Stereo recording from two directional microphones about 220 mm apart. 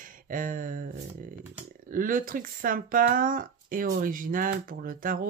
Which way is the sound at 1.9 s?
40° right (ahead or behind).